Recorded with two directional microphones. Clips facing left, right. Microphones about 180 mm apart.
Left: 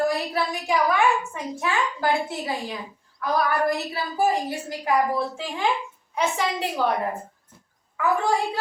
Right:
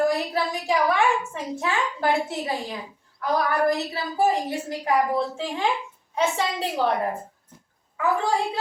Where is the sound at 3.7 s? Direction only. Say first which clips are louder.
Right 1 dB; 25° right (ahead or behind).